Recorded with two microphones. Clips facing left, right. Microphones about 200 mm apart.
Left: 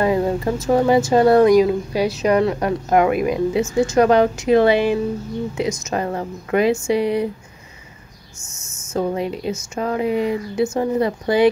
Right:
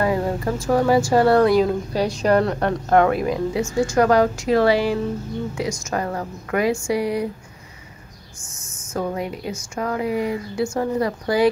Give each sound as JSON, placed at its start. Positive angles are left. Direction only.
{"t": 0.0, "sound": "speech", "side_deg": 20}
{"t": 8.4, "sound": "speech", "side_deg": 25}